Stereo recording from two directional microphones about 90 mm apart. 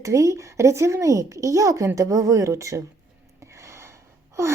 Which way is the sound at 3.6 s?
30° right (ahead or behind).